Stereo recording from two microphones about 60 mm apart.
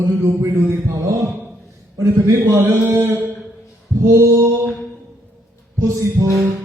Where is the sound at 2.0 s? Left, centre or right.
Right.